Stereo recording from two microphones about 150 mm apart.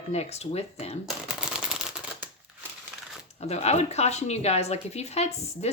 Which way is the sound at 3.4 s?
45° left (ahead or behind).